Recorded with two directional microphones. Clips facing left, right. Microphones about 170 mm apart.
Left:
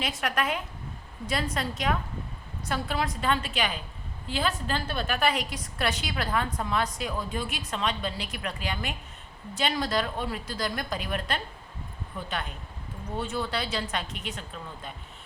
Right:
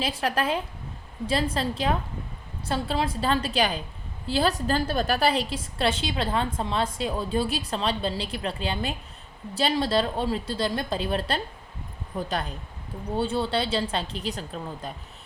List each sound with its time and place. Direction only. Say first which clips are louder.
0.0 s a woman's voice: right 3 dB; 30° right (ahead or behind)